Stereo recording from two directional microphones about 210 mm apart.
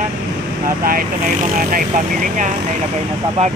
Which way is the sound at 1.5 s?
40° right (ahead or behind).